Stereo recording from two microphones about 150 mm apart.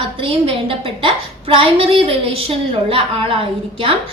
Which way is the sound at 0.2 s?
35° right (ahead or behind).